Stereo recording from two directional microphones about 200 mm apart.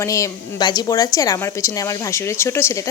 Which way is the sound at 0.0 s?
15° left (ahead or behind).